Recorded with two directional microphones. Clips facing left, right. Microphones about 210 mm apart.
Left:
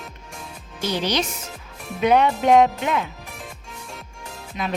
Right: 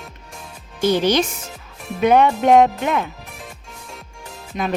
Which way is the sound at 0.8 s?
50° right (ahead or behind).